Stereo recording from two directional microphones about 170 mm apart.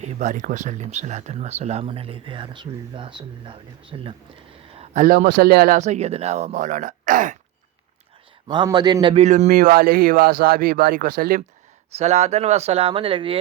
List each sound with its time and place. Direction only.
0.0 s speech: 45° right (ahead or behind)
4.7 s a sound: 35° right (ahead or behind)
5.0 s speech: 60° right (ahead or behind)
8.4 s a man's voice: 25° right (ahead or behind)
9.2 s speech: 45° right (ahead or behind)
9.5 s speech: 60° right (ahead or behind)
11.9 s speech: 40° right (ahead or behind)